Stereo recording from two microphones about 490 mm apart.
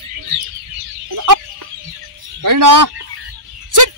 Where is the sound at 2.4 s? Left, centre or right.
Right.